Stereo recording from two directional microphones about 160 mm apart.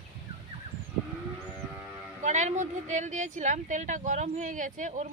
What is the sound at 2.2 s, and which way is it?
A woman's voice, 50° right (ahead or behind).